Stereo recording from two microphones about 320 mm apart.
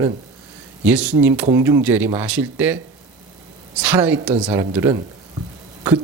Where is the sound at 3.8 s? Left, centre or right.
Centre.